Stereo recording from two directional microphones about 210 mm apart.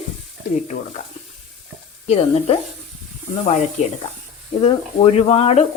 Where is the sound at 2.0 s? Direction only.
30° left (ahead or behind).